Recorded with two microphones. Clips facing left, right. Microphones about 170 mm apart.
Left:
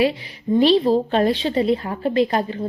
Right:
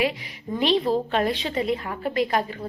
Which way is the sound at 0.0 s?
30° left (ahead or behind).